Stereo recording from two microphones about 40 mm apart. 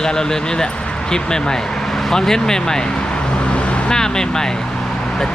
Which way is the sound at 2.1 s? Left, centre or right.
Centre.